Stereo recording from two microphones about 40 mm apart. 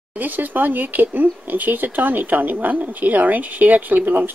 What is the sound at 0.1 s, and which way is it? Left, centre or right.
Speech, right.